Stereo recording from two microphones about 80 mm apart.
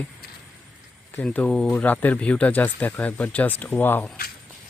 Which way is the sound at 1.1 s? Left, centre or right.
Centre.